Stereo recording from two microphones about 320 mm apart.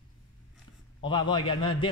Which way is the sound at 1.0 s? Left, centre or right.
Centre.